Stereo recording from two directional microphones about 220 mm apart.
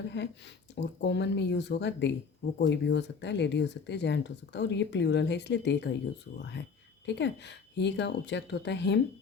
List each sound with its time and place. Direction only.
0.1 s speech: 50° left (ahead or behind)